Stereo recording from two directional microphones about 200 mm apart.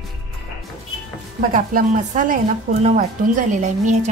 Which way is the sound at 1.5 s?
45° right (ahead or behind).